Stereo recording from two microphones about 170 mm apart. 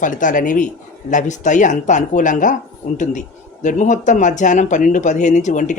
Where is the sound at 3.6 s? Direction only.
45° left (ahead or behind).